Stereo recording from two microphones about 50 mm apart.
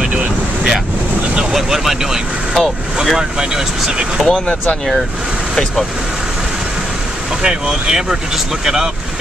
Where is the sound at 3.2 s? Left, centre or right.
Centre.